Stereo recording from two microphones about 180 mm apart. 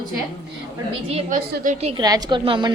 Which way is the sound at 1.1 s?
40° right (ahead or behind).